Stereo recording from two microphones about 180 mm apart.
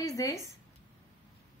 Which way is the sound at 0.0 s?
20° left (ahead or behind).